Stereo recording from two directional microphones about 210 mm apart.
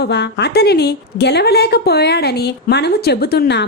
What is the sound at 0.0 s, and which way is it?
A woman's voice, 55° left (ahead or behind).